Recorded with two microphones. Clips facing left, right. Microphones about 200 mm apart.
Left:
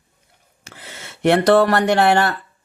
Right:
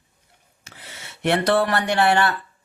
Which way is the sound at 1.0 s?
60° left (ahead or behind).